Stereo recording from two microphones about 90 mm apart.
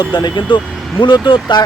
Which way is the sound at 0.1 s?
55° left (ahead or behind).